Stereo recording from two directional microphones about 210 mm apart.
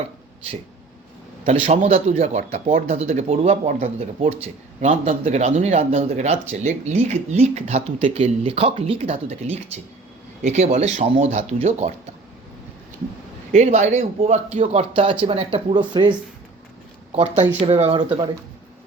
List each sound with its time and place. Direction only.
1.5 s speech: 30° right (ahead or behind)
13.6 s speech: 35° right (ahead or behind)